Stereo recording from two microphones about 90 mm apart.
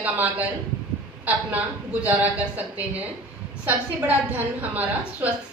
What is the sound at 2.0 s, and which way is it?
Speech, 20° right (ahead or behind).